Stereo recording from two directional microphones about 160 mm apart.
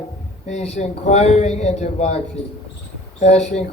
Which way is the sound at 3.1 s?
45° left (ahead or behind).